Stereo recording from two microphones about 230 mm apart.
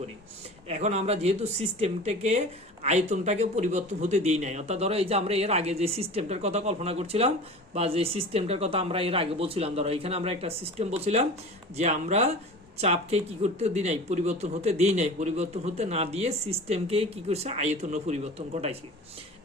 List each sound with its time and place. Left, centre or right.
0.7 s a man's voice: right